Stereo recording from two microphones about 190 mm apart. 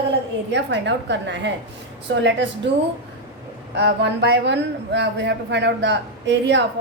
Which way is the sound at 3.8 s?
65° right (ahead or behind).